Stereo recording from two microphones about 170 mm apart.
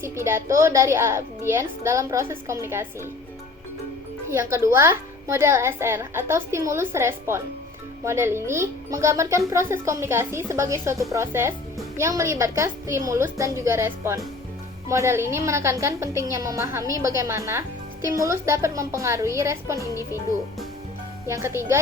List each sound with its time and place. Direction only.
0.0 s a child's voice: 15° right (ahead or behind)
4.3 s a child's voice: 15° right (ahead or behind)
21.2 s a child's voice: 15° right (ahead or behind)